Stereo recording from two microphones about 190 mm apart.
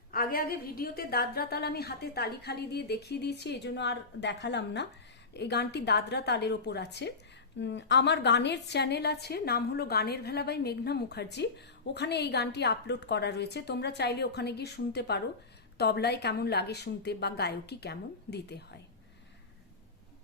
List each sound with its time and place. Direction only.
0.1 s a woman's voice: 50° left (ahead or behind)